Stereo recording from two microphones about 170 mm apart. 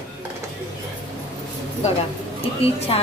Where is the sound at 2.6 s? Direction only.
35° left (ahead or behind).